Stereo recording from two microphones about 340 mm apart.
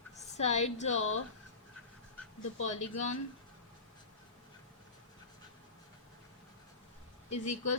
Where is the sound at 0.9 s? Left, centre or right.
Left.